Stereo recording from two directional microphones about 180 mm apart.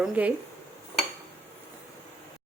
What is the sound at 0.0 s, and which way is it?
Speech, 10° right (ahead or behind).